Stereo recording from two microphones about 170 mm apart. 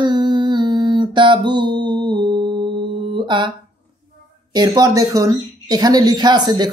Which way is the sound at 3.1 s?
25° right (ahead or behind).